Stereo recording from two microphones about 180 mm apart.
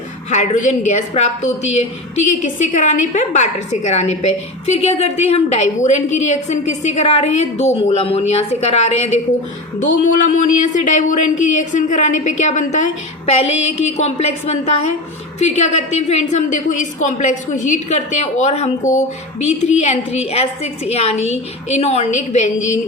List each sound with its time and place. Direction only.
0.3 s a woman's voice: 40° left (ahead or behind)